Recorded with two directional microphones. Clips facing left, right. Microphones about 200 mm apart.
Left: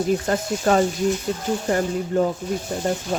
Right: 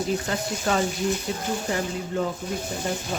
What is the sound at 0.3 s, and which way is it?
Speech, 45° left (ahead or behind).